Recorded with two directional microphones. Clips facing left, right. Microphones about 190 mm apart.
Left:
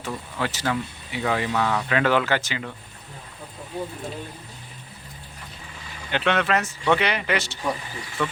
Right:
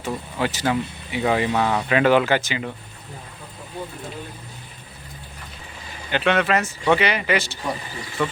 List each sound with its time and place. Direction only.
0.0 s speech: 15° right (ahead or behind)
6.1 s a man's voice: 5° right (ahead or behind)